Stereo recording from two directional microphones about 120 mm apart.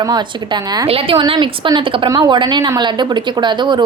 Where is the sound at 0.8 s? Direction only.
55° right (ahead or behind).